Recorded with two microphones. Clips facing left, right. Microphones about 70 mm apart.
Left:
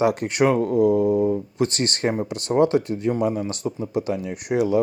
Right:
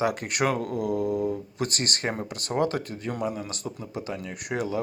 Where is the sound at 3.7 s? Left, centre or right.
Left.